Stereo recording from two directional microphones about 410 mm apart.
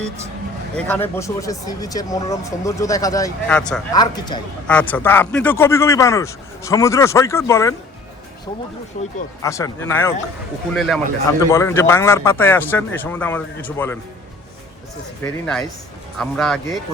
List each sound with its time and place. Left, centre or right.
0.8 s speech: centre
8.9 s speech: centre
15.2 s speech: centre